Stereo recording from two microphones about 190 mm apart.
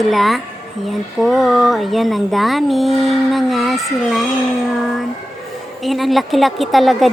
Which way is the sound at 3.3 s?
Centre (ahead or behind).